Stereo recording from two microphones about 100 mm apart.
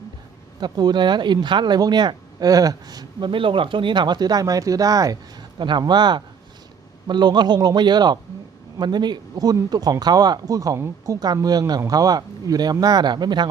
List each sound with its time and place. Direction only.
0.6 s speech: 45° right (ahead or behind)
5.5 s speech: 50° right (ahead or behind)